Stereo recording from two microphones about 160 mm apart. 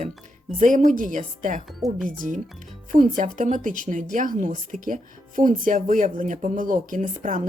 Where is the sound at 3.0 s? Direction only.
50° right (ahead or behind).